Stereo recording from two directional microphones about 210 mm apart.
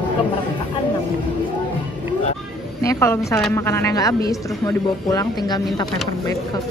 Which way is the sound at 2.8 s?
15° left (ahead or behind).